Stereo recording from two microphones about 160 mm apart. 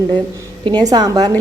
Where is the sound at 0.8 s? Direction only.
25° right (ahead or behind).